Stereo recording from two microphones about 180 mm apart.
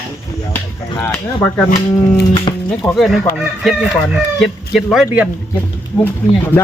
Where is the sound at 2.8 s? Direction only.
Centre (ahead or behind).